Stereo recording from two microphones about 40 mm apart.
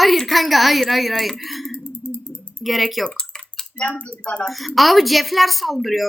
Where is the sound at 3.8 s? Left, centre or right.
Left.